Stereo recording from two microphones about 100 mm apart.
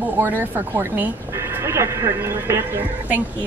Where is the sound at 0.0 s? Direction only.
15° right (ahead or behind).